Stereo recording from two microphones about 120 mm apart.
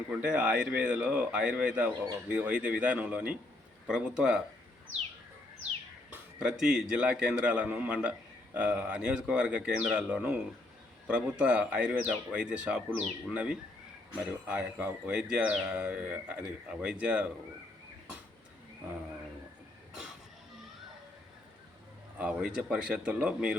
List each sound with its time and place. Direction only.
0.1 s speech: 10° right (ahead or behind)
6.1 s speech: 5° right (ahead or behind)
22.2 s speech: 10° right (ahead or behind)